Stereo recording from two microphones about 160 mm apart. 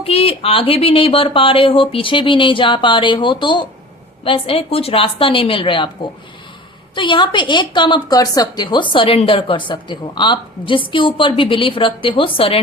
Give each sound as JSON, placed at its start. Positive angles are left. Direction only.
{"t": 0.0, "sound": "a woman's voice", "side_deg": 40}
{"t": 6.9, "sound": "a woman's voice", "side_deg": 30}